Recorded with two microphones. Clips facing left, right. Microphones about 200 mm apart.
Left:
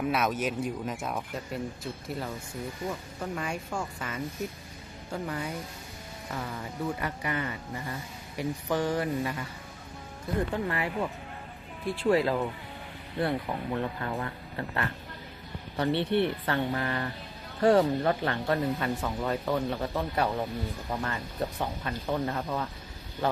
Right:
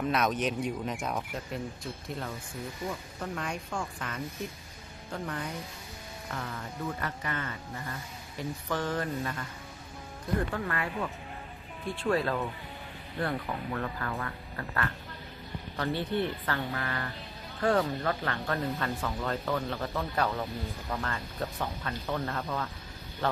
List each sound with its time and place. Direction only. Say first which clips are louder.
0.0 s speech: even; 5° left (ahead or behind)
3.2 s speech: left 2 dB; 5° left (ahead or behind)
10.5 s speech: left 3 dB; 20° left (ahead or behind)
15.9 s speech: left 4 dB; 70° left (ahead or behind)
16.4 s speech: left 4 dB; 25° left (ahead or behind)